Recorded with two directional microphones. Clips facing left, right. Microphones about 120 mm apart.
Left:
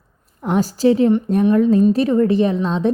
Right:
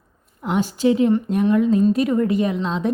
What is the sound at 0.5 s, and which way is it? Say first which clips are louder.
A woman's voice: left 3 dB; 35° left (ahead or behind).